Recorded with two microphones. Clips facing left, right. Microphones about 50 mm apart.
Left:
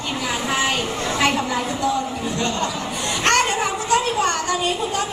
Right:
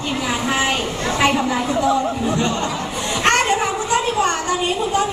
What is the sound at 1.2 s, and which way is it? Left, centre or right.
Speech, centre.